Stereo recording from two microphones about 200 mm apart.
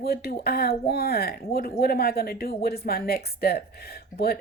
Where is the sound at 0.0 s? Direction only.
50° left (ahead or behind).